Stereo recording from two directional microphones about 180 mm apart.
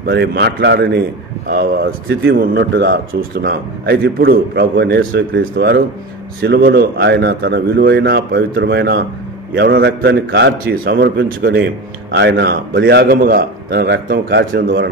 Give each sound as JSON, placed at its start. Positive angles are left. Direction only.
{"t": 0.0, "sound": "speech", "side_deg": -75}
{"t": 12.1, "sound": "speech", "side_deg": -70}